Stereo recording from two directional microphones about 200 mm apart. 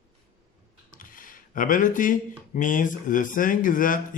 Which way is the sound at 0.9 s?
45° left (ahead or behind).